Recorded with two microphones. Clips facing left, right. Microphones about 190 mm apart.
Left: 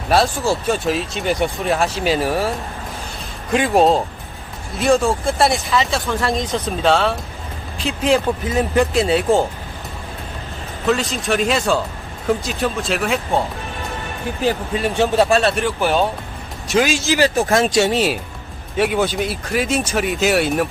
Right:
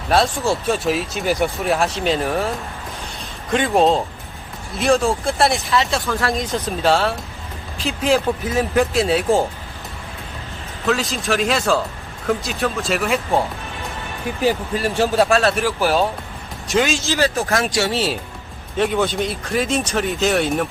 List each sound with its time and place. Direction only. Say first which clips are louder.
0.1 s speech: left 1 dB; centre (ahead or behind)
3.5 s speech: left 1 dB; 5° left (ahead or behind)
10.8 s speech: left 1 dB; centre (ahead or behind)
14.9 s speech: left 1 dB; centre (ahead or behind)
16.7 s speech: left 2 dB; 10° left (ahead or behind)
18.8 s speech: left 1 dB; 5° left (ahead or behind)